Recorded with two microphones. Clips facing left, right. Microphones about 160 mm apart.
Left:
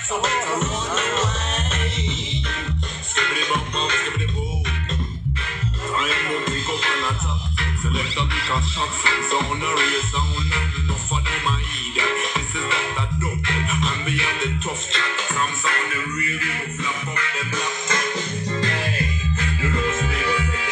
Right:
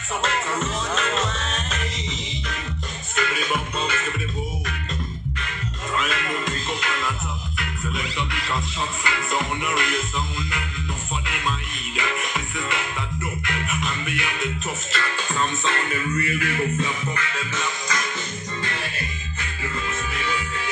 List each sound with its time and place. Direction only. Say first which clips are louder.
0.2 s music: left 1 dB; 5° left (ahead or behind)
3.2 s music: even; 5° right (ahead or behind)
5.9 s music: left 1 dB; centre (ahead or behind)
9.3 s music: left 2 dB; centre (ahead or behind)
14.1 s music: left 2 dB; 25° left (ahead or behind)